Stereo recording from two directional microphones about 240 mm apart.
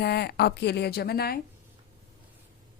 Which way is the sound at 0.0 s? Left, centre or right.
Left.